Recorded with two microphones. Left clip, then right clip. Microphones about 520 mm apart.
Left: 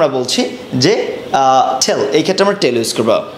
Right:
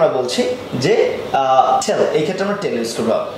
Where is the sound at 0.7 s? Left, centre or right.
Left.